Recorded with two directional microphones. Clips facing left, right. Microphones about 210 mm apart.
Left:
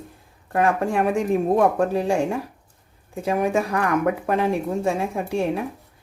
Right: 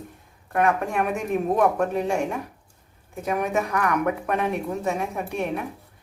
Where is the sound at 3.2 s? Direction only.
30° left (ahead or behind).